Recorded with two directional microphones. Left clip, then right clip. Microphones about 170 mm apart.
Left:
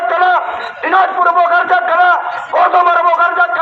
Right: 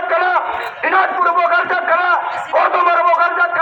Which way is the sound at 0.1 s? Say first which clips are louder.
Left 2 dB; 25° left (ahead or behind).